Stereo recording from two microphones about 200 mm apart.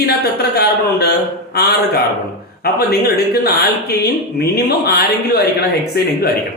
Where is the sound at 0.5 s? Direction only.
55° left (ahead or behind).